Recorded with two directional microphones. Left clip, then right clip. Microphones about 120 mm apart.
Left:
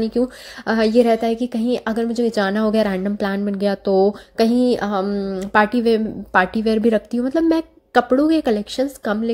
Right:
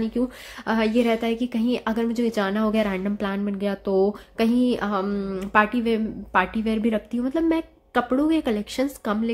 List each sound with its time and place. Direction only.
0.7 s a woman's voice: 30° left (ahead or behind)
2.4 s a woman's voice: 30° left (ahead or behind)
5.0 s speech: 15° left (ahead or behind)
5.5 s a woman's voice: 35° left (ahead or behind)
8.7 s speech: 15° left (ahead or behind)